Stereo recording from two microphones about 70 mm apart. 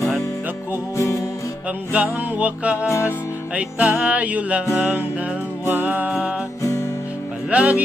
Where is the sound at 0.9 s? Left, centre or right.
Left.